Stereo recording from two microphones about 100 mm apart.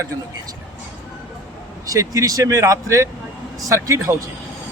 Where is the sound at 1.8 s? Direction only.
35° right (ahead or behind).